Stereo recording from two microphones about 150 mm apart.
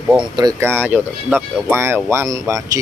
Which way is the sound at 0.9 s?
15° right (ahead or behind).